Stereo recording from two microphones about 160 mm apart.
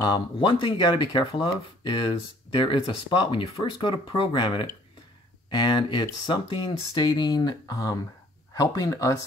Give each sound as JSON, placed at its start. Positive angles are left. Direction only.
{"t": 0.0, "sound": "speech", "side_deg": 30}